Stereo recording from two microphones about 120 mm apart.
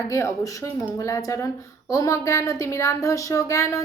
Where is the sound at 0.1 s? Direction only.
25° left (ahead or behind).